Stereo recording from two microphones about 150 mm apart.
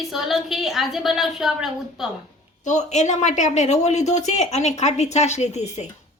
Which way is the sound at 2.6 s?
50° left (ahead or behind).